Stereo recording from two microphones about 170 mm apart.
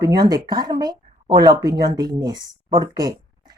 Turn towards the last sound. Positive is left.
turn(degrees=-25)  # may be behind; listen again after turning